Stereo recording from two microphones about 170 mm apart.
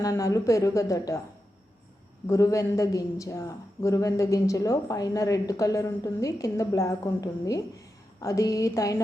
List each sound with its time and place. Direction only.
0.0 s a woman's voice: 20° left (ahead or behind)
2.2 s a woman's voice: 20° left (ahead or behind)